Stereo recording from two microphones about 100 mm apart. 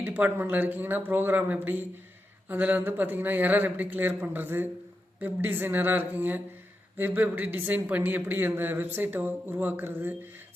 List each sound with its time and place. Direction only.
0.0 s a woman's voice: 20° right (ahead or behind)